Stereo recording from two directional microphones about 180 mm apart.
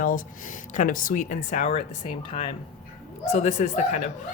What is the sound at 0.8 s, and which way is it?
Speech, 50° left (ahead or behind).